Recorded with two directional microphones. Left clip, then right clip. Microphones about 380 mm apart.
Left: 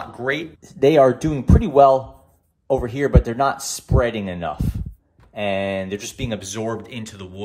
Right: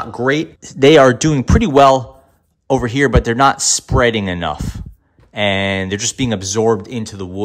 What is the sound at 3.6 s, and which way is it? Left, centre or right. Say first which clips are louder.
Speech: right 7 dB; centre.